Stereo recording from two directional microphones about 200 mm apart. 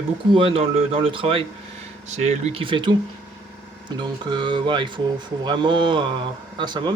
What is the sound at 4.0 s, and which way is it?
Speech, 20° right (ahead or behind).